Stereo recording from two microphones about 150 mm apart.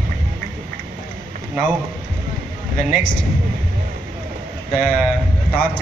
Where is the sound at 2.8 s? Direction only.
60° left (ahead or behind).